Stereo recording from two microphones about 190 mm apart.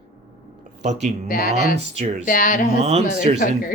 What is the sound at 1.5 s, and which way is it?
Speech, 35° right (ahead or behind).